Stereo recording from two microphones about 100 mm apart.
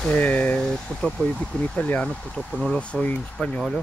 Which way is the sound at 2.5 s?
5° right (ahead or behind).